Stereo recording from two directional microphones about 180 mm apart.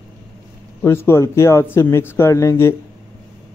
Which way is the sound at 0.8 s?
15° left (ahead or behind).